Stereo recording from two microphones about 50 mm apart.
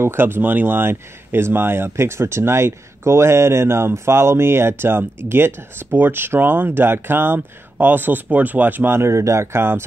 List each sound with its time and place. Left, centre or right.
0.0 s speech: right
8.9 s speech: right